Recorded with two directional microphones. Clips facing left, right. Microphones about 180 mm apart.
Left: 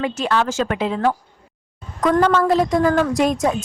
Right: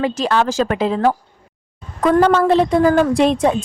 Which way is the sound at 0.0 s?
35° right (ahead or behind).